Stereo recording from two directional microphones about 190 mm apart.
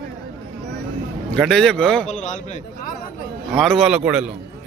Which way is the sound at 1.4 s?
Centre (ahead or behind).